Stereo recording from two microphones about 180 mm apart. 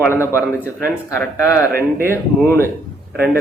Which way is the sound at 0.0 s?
15° left (ahead or behind).